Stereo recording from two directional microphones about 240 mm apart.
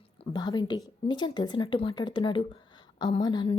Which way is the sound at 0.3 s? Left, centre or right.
Centre.